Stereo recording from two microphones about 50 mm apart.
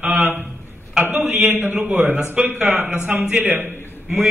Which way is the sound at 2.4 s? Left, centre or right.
Right.